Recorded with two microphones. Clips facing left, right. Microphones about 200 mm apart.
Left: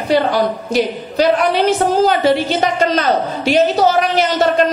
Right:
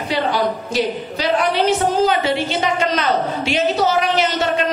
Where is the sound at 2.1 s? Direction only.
40° left (ahead or behind).